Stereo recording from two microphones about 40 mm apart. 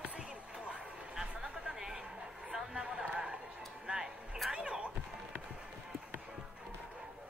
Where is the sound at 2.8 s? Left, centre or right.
Right.